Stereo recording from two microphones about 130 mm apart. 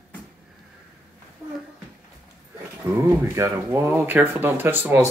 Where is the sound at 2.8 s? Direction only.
15° right (ahead or behind).